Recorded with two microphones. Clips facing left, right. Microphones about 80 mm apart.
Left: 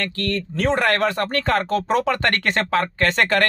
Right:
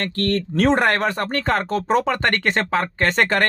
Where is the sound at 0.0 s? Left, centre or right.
Right.